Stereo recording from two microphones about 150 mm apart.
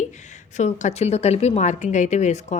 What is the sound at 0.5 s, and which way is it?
A woman's voice, 50° left (ahead or behind).